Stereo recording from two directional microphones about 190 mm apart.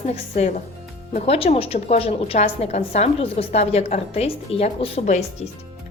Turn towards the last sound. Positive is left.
turn(degrees=35)  # may be behind; listen again after turning